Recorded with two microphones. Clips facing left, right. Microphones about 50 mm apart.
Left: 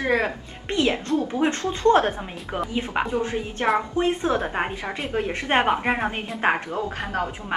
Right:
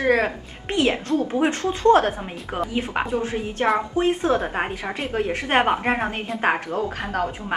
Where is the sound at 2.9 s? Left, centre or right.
Centre.